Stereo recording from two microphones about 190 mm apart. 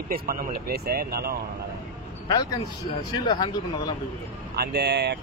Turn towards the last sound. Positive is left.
turn(degrees=-60)  # may be behind; listen again after turning